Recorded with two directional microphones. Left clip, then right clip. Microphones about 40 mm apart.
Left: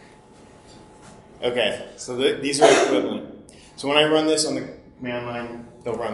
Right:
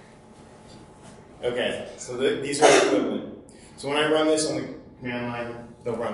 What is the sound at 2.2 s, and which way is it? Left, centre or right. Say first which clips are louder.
Speech: left 3 dB; right.